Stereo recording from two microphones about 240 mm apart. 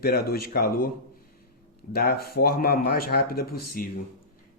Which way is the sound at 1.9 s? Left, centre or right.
Left.